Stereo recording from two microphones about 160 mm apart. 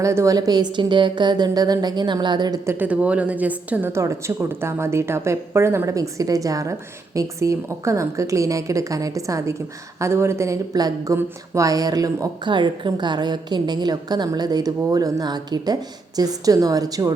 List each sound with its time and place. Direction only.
0.0 s speech: 20° right (ahead or behind)
2.7 s a woman's voice: 10° right (ahead or behind)